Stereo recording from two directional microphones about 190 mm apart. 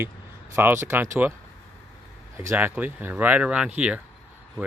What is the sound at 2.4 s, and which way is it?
Speech, 10° right (ahead or behind).